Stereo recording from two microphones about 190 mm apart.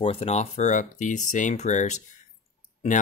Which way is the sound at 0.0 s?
30° left (ahead or behind).